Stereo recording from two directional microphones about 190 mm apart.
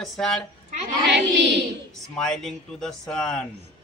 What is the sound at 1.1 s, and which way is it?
Speech, 65° right (ahead or behind).